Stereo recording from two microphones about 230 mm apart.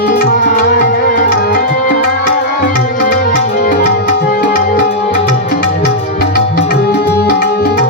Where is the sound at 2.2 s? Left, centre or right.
Left.